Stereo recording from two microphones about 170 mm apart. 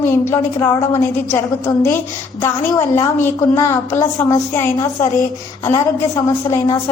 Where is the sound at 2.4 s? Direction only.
15° left (ahead or behind).